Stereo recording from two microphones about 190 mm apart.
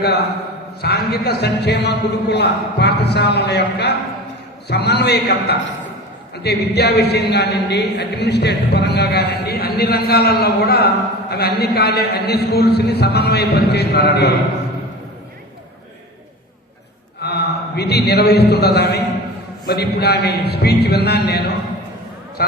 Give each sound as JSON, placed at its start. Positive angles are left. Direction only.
{"t": 0.8, "sound": "speech", "side_deg": 55}
{"t": 17.2, "sound": "a man's voice", "side_deg": 60}